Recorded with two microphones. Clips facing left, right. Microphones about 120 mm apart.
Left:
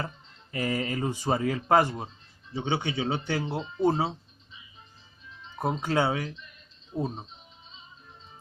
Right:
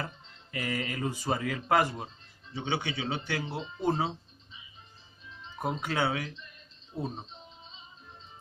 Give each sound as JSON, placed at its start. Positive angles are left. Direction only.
{"t": 0.5, "sound": "speech", "side_deg": 35}
{"t": 5.5, "sound": "speech", "side_deg": 30}
{"t": 6.9, "sound": "speech", "side_deg": 20}